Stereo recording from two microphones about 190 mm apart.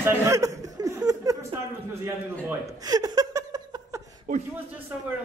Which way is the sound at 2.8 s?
20° right (ahead or behind).